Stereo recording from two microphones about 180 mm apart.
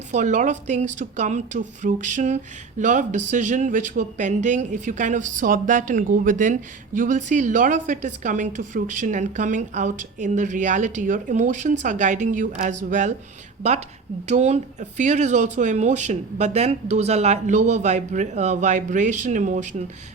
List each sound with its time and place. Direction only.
0.1 s a woman's voice: 45° right (ahead or behind)